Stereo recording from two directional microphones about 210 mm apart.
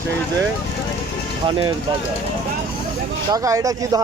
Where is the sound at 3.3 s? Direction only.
15° right (ahead or behind).